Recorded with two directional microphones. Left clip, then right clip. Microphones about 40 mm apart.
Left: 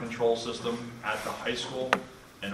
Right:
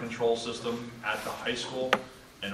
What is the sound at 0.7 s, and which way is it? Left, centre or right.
Speech, centre.